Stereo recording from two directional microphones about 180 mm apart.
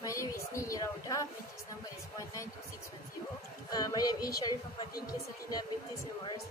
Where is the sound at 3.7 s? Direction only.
20° left (ahead or behind).